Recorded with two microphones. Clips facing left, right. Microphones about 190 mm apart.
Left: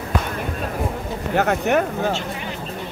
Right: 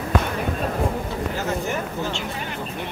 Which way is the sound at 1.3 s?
65° left (ahead or behind).